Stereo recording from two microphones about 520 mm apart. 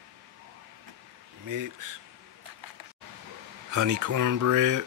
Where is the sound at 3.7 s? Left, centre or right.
Right.